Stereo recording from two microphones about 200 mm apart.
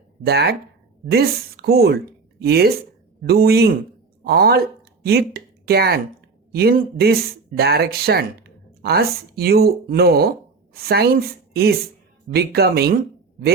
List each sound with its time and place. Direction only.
0.3 s speech: 55° right (ahead or behind)